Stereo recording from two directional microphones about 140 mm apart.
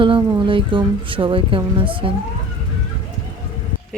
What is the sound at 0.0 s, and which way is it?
Speech, 35° right (ahead or behind).